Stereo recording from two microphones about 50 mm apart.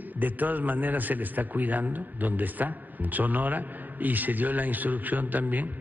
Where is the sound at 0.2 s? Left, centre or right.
Right.